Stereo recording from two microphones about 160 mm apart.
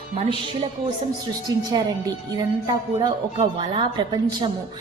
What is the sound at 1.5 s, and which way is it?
A woman's voice, 25° right (ahead or behind).